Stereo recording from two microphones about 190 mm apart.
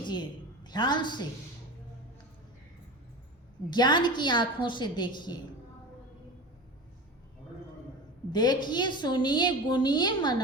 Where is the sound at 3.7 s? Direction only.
25° left (ahead or behind).